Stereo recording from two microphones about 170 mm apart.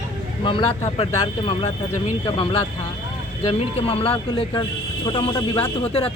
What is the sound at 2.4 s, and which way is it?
Speech, 30° left (ahead or behind).